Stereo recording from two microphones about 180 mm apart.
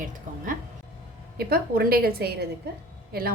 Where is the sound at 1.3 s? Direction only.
55° right (ahead or behind).